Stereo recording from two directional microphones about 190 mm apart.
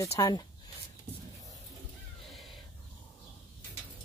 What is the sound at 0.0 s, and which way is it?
Speech, 20° left (ahead or behind).